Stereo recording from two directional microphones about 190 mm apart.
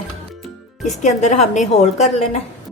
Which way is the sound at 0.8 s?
40° left (ahead or behind).